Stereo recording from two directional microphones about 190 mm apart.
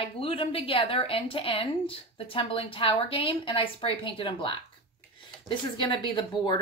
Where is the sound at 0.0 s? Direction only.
30° left (ahead or behind).